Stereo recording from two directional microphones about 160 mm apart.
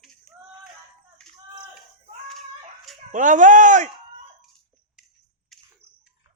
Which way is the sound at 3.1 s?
50° right (ahead or behind).